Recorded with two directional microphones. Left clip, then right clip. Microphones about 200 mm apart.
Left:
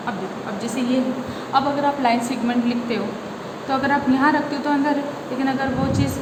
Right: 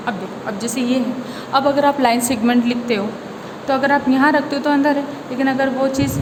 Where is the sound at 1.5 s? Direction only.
55° right (ahead or behind).